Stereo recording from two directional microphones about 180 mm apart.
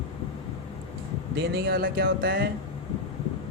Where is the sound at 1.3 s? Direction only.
60° right (ahead or behind).